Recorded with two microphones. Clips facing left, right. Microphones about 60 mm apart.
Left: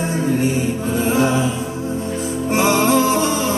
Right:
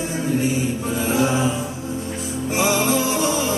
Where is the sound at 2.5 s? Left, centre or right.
Left.